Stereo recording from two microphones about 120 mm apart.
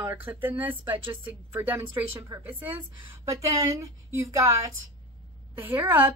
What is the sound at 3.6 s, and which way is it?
A woman's voice, 25° right (ahead or behind).